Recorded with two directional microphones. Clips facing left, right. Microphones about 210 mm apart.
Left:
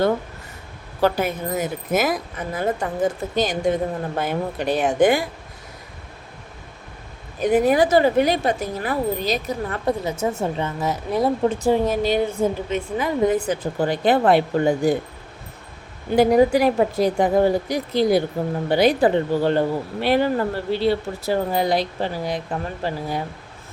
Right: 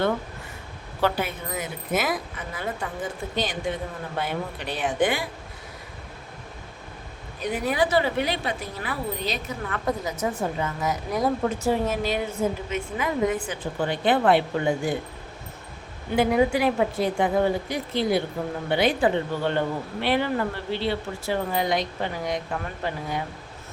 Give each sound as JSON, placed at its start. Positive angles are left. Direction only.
{"t": 1.0, "sound": "a woman's voice", "side_deg": 40}
{"t": 7.4, "sound": "speech", "side_deg": 45}
{"t": 16.1, "sound": "speech", "side_deg": 40}